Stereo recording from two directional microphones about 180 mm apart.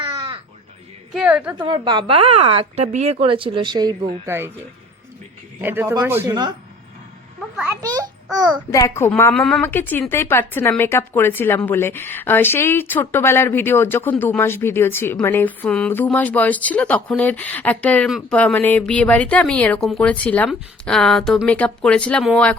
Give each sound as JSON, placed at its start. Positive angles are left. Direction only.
{"t": 0.0, "sound": "crow", "side_deg": -25}
{"t": 1.1, "sound": "speech", "side_deg": -5}
{"t": 1.5, "sound": "a woman's voice", "side_deg": -25}
{"t": 5.6, "sound": "speech", "side_deg": -10}
{"t": 7.5, "sound": "a child's voice", "side_deg": -10}
{"t": 7.8, "sound": "a child's voice", "side_deg": -20}
{"t": 8.7, "sound": "speech", "side_deg": 15}